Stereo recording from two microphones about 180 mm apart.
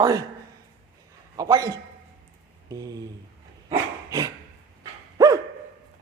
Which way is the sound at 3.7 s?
20° right (ahead or behind).